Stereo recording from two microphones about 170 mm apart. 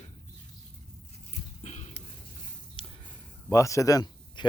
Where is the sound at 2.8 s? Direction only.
30° left (ahead or behind).